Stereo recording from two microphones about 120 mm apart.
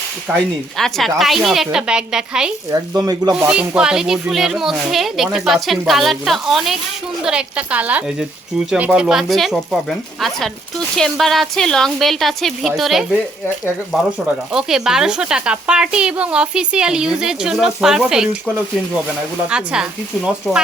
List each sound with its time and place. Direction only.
0.3 s speech: centre (ahead or behind)
2.6 s speech: 30° right (ahead or behind)
3.3 s a woman's voice: 10° right (ahead or behind)
14.5 s a woman's voice: 5° right (ahead or behind)
19.5 s a woman's voice: 5° right (ahead or behind)